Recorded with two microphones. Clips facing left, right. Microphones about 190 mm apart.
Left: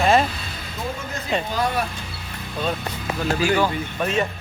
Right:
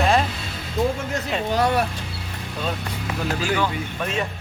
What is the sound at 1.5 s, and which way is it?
Speech, 70° right (ahead or behind).